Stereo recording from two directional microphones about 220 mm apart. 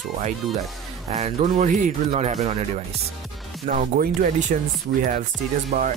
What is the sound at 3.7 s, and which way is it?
Speech, 35° right (ahead or behind).